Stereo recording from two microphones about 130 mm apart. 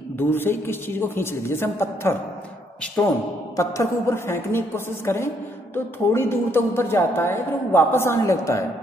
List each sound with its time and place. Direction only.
0.2 s a woman's voice: 15° left (ahead or behind)